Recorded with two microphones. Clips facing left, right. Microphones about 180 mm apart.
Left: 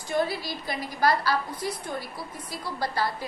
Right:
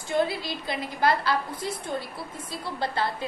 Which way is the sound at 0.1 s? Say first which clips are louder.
Right 1 dB; 20° right (ahead or behind).